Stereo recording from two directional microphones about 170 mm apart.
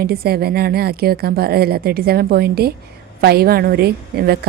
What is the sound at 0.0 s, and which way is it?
A woman's voice, 65° right (ahead or behind).